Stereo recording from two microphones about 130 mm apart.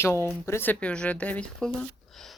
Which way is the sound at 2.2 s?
Centre (ahead or behind).